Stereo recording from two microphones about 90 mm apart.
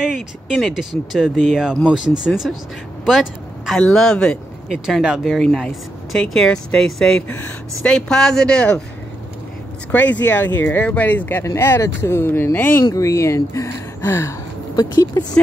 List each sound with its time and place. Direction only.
0.0 s speech: 5° right (ahead or behind)
4.6 s speech: 5° right (ahead or behind)
5.2 s speech: 5° left (ahead or behind)
7.2 s speech: 25° left (ahead or behind)
7.8 s speech: 5° left (ahead or behind)
9.8 s speech: 20° left (ahead or behind)
12.9 s speech: 35° left (ahead or behind)
14.8 s speech: 45° left (ahead or behind)